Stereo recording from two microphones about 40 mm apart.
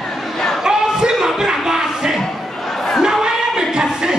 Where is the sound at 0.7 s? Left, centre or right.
Centre.